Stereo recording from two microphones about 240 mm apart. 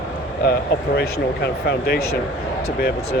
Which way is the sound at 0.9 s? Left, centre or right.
Left.